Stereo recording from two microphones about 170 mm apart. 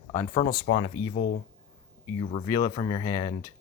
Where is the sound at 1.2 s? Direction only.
90° left.